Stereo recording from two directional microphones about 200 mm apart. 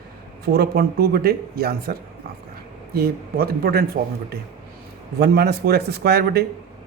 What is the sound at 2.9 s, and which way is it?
Speech, 50° right (ahead or behind).